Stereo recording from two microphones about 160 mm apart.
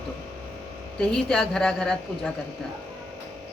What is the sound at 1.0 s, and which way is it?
Speech, 5° left (ahead or behind).